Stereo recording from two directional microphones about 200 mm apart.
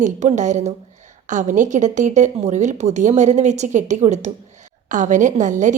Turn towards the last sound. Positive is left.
turn(degrees=-40)  # may be behind; listen again after turning